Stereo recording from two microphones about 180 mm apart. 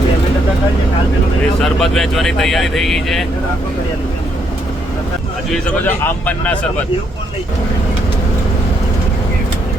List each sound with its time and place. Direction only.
1.6 s speech: centre (ahead or behind)
5.8 s speech: 10° left (ahead or behind)